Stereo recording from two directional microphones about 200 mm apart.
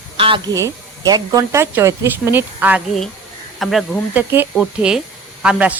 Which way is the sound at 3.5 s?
Centre (ahead or behind).